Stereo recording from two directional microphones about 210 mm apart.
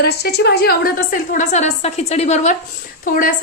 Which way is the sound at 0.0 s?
50° left (ahead or behind).